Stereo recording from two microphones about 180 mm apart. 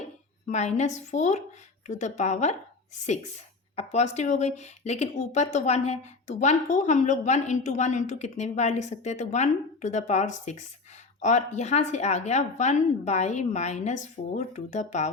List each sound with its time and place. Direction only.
0.4 s speech: 40° left (ahead or behind)
3.8 s speech: 40° left (ahead or behind)